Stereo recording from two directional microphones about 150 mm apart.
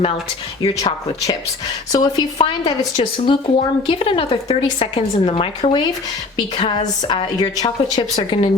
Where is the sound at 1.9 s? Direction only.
25° left (ahead or behind).